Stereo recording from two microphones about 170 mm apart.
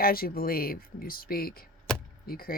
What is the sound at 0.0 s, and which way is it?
Speech, 60° left (ahead or behind).